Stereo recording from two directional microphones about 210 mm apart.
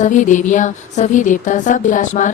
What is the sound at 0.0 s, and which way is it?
Speech, 35° left (ahead or behind).